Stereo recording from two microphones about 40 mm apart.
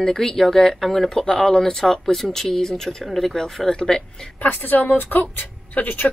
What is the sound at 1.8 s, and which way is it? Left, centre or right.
Speech, centre.